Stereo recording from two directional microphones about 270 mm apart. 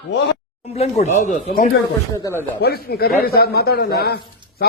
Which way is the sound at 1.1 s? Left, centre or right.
Left.